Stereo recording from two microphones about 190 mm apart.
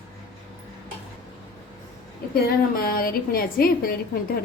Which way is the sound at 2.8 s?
50° left (ahead or behind).